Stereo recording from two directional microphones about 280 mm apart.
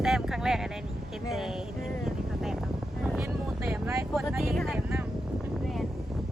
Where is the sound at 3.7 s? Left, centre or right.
Centre.